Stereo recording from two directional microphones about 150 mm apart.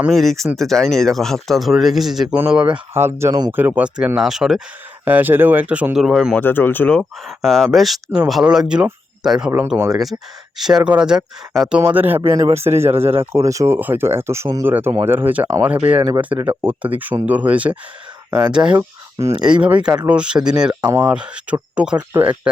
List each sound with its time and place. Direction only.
0.1 s speech: centre (ahead or behind); by 3.5 s 25° right (ahead or behind)
3.5 s speech: 10° right (ahead or behind)
6.4 s speech: 15° left (ahead or behind); by 17.7 s 10° right (ahead or behind)
18.3 s speech: 25° right (ahead or behind)
18.5 s speech: 10° right (ahead or behind)
19.8 s speech: 25° right (ahead or behind)
20.1 s speech: 5° right (ahead or behind)
20.8 s speech: 25° right (ahead or behind)
21.1 s speech: 5° right (ahead or behind)